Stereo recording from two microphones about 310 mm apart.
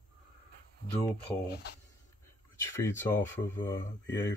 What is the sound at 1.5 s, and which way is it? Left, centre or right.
Speech, left.